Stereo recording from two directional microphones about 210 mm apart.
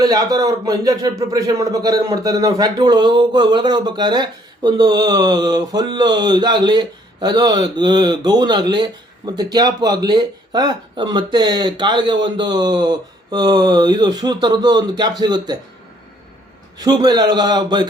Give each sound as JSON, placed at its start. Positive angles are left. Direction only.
{"t": 0.0, "sound": "speech", "side_deg": -20}
{"t": 16.7, "sound": "speech", "side_deg": -20}